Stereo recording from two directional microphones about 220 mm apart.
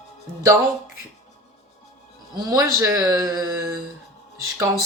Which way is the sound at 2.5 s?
15° right (ahead or behind).